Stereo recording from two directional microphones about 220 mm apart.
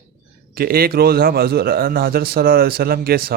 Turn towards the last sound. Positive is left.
turn(degrees=-45)  # may be behind; listen again after turning